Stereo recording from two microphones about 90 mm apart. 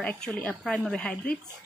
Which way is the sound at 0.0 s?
10° left (ahead or behind).